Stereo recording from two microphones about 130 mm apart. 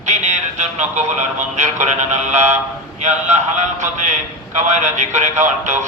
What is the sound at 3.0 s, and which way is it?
A man's voice, 65° right (ahead or behind).